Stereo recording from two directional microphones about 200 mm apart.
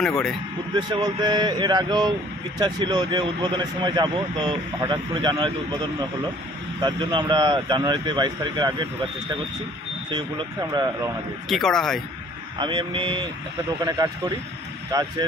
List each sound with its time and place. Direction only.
0.0 s speech: centre (ahead or behind)
0.8 s speech: 20° right (ahead or behind)
10.7 s speech: 20° right (ahead or behind)
11.4 s speech: centre (ahead or behind)
12.5 s speech: 25° right (ahead or behind)
14.9 s speech: 15° right (ahead or behind)